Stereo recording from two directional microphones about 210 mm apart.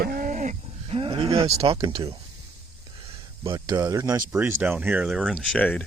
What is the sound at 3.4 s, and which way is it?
Speech, 15° right (ahead or behind).